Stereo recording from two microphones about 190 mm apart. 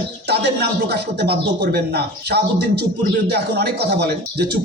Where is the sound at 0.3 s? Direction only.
60° right (ahead or behind).